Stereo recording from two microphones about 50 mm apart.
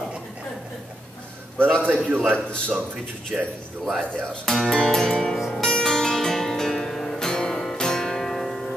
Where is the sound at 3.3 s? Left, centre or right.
Centre.